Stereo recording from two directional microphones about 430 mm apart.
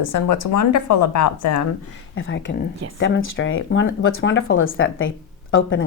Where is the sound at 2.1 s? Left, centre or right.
Left.